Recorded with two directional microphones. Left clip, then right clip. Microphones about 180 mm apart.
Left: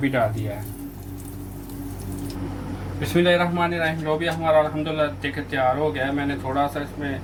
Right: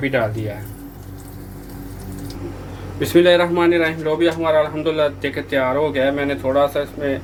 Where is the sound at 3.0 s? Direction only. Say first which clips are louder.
Right 6 dB; 55° right (ahead or behind).